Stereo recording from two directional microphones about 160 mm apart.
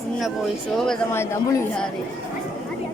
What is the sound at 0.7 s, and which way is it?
Speech, 5° left (ahead or behind).